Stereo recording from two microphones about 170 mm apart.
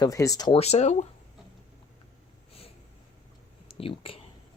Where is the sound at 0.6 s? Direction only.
40° left (ahead or behind).